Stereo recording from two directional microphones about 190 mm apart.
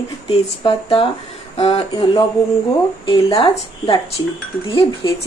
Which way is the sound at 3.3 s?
25° left (ahead or behind).